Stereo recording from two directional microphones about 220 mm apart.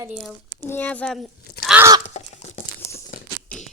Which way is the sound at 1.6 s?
10° right (ahead or behind).